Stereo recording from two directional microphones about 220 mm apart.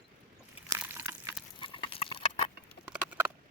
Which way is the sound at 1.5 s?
25° left (ahead or behind).